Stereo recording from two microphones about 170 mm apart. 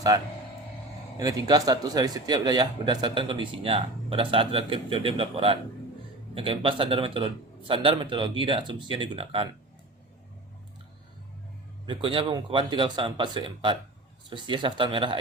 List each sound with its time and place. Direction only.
0.1 s a man's voice: 20° right (ahead or behind)
11.9 s a man's voice: 30° right (ahead or behind)